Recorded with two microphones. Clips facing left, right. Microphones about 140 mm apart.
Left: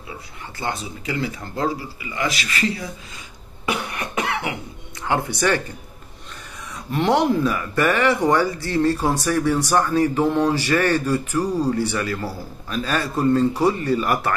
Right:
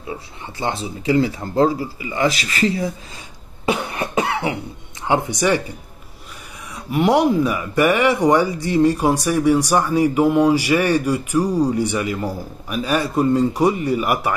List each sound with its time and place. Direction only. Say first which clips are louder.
0.6 s speech: right 4 dB; 25° right (ahead or behind)
3.6 s cough: right 4 dB; 25° right (ahead or behind)
5.0 s speech: right 3 dB; 20° right (ahead or behind)
6.9 s speech: right 3 dB; 10° right (ahead or behind)